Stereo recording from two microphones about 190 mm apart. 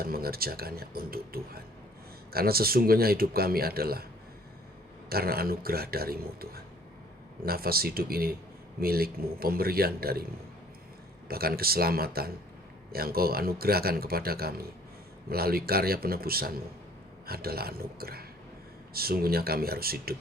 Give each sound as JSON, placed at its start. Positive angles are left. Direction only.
{"t": 0.0, "sound": "speech", "side_deg": -50}
{"t": 5.0, "sound": "speech", "side_deg": -55}
{"t": 11.3, "sound": "speech", "side_deg": -55}